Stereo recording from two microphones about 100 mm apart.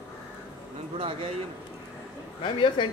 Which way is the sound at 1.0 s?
70° right (ahead or behind).